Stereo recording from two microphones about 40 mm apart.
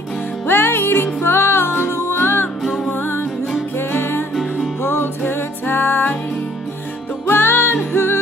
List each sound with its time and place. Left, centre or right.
0.5 s music: left
2.6 s music: centre
2.9 s music: left
7.2 s music: left